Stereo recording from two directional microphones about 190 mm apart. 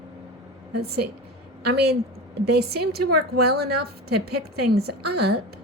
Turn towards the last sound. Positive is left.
turn(degrees=-60)  # may be behind; listen again after turning